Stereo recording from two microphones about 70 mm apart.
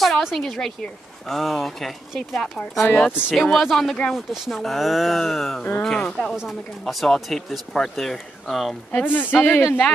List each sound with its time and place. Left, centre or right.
0.0 s a woman's voice: centre
2.9 s speech: left
3.3 s speech: centre
8.9 s speech: left